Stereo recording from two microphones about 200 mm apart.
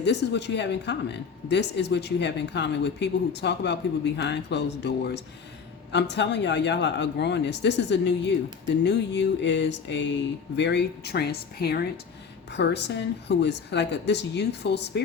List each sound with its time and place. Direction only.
0.0 s speech: 60° left (ahead or behind)